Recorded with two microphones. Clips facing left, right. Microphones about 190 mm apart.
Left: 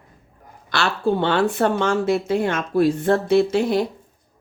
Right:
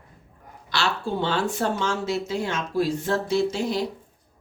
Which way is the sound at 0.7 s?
55° left (ahead or behind).